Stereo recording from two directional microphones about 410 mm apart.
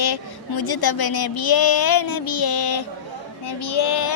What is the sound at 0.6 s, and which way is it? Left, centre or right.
Child singing, left.